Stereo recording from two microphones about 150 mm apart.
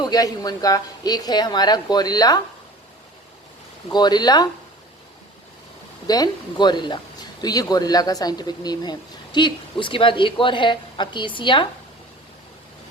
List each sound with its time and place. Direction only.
0.0 s speech: 25° left (ahead or behind)
3.8 s speech: 30° left (ahead or behind)
6.1 s speech: 25° left (ahead or behind)